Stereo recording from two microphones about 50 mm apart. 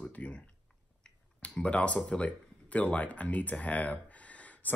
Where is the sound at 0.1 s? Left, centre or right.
Left.